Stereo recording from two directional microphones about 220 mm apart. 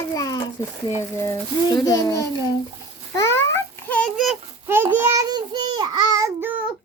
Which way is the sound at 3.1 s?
15° left (ahead or behind).